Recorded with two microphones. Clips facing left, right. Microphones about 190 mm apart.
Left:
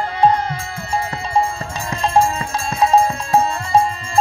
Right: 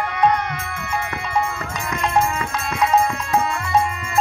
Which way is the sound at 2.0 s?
30° left (ahead or behind).